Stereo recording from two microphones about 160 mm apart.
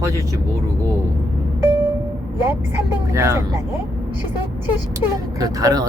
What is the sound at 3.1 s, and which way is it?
Speech, 20° right (ahead or behind).